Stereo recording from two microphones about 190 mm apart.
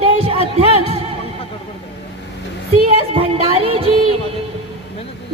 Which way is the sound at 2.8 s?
30° right (ahead or behind).